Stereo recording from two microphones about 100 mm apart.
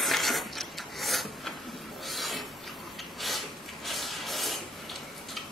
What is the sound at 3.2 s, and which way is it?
Rub, centre (ahead or behind).